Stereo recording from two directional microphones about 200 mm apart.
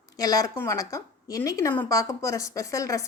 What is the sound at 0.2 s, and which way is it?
A woman's voice, 20° left (ahead or behind).